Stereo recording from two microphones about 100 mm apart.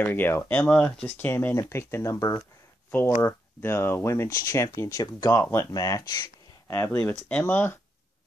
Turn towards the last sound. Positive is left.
turn(degrees=20)  # may be behind; listen again after turning